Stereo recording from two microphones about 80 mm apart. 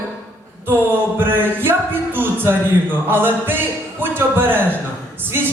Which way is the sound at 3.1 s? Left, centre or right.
Right.